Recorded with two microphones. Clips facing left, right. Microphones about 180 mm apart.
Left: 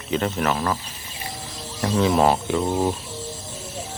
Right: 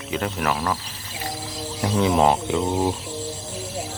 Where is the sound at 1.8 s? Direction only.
15° right (ahead or behind).